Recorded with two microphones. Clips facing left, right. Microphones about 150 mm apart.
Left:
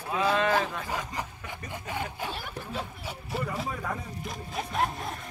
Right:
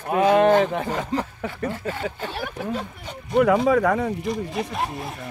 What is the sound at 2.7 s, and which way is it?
Speech, 5° left (ahead or behind).